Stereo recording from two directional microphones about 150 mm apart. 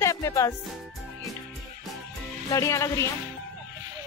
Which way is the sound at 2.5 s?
20° left (ahead or behind).